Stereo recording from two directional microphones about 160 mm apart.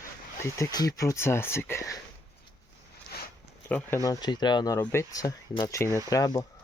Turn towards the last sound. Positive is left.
turn(degrees=20)  # may be behind; listen again after turning